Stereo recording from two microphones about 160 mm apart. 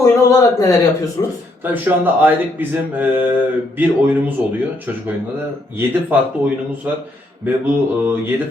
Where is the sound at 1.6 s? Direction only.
10° right (ahead or behind).